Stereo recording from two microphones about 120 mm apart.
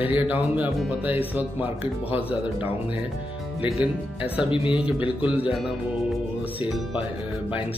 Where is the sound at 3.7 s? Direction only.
50° left (ahead or behind).